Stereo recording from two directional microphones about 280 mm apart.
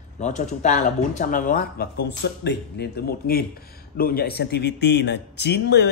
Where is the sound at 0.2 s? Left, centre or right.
Left.